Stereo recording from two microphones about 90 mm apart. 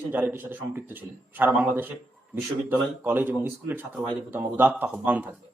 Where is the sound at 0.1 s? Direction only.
20° right (ahead or behind).